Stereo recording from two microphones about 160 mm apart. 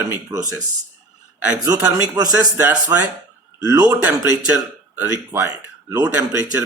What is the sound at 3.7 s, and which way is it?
Speech, 25° right (ahead or behind).